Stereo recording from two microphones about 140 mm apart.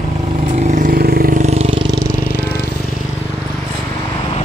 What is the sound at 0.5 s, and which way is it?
Vehicle, 60° right (ahead or behind).